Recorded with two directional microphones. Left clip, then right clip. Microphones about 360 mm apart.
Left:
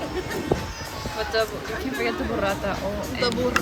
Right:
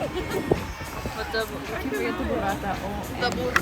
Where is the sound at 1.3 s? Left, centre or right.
Centre.